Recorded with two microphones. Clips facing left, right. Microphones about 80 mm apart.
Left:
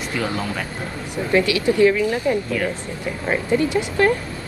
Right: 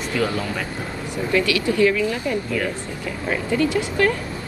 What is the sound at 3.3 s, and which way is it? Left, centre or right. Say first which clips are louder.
Speech: left 1 dB; left.